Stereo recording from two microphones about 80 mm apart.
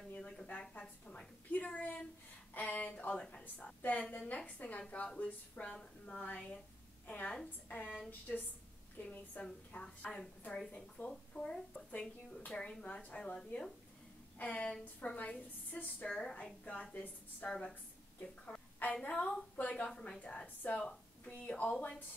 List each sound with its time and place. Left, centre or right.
0.1 s a woman's voice: centre
14.4 s a woman's voice: centre
18.4 s a sound: centre
19.0 s a woman's voice: centre
20.8 s a sound: centre
21.5 s a woman's voice: centre